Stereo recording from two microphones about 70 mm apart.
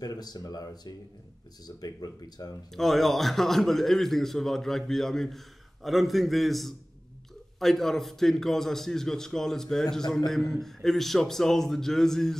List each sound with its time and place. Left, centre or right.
0.0 s speech: left
2.7 s a man's voice: centre